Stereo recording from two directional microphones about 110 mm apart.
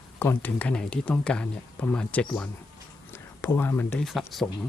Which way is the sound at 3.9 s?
Centre (ahead or behind).